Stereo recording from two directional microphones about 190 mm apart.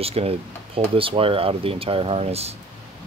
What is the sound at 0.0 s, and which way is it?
Speech, 30° right (ahead or behind).